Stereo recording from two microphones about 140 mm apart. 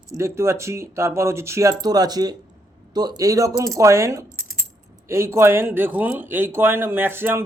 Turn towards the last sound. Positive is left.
turn(degrees=-15)  # may be behind; listen again after turning